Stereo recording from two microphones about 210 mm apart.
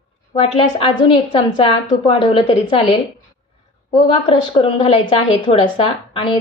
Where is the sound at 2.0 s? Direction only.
25° left (ahead or behind).